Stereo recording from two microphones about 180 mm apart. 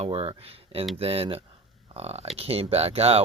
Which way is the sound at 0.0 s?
30° right (ahead or behind).